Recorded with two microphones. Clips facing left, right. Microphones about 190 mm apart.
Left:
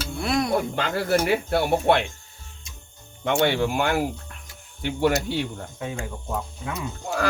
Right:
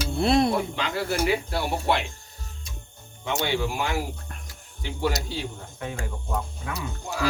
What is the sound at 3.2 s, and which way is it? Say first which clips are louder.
Speech: left 5 dB; 55° left (ahead or behind).